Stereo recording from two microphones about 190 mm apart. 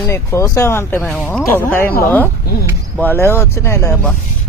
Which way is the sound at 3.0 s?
10° left (ahead or behind).